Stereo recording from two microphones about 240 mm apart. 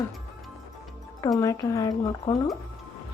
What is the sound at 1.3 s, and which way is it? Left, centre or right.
A woman's voice, centre.